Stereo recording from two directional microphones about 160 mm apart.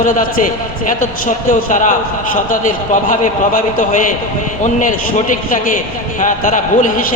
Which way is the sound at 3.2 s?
50° left (ahead or behind).